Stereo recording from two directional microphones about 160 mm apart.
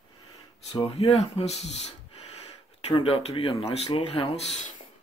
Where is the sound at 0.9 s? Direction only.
40° left (ahead or behind).